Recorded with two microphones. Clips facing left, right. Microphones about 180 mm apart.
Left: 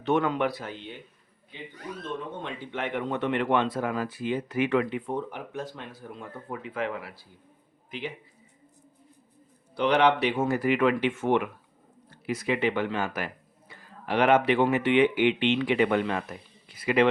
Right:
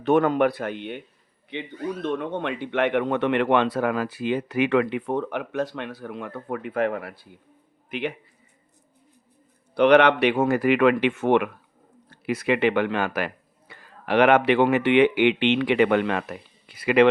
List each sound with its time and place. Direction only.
0.0 s speech: 50° right (ahead or behind)
7.9 s a man's voice: 65° right (ahead or behind)
9.7 s speech: 65° right (ahead or behind)